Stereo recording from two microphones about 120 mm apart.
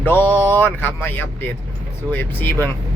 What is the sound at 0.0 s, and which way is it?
Mantra, 20° left (ahead or behind).